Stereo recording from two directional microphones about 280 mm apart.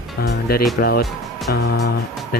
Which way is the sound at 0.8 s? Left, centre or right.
Left.